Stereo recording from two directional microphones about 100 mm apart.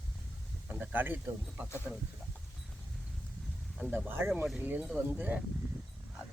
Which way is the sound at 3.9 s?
20° right (ahead or behind).